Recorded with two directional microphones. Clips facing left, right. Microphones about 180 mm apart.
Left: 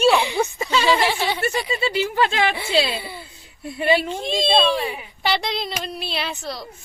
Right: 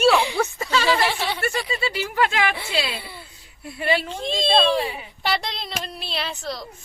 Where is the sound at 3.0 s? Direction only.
Centre (ahead or behind).